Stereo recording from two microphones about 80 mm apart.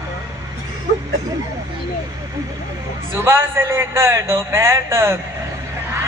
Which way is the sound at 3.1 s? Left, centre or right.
Right.